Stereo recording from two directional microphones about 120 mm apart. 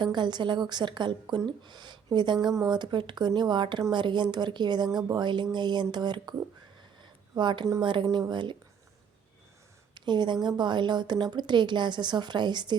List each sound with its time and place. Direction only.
0.0 s a woman's voice: 40° right (ahead or behind)
7.0 s a sound: 40° right (ahead or behind)
7.8 s speech: 45° right (ahead or behind)
8.0 s speech: 25° right (ahead or behind)
8.3 s a woman's voice: 40° right (ahead or behind)
9.9 s a sound: 40° right (ahead or behind)
10.6 s a woman's voice: 40° right (ahead or behind)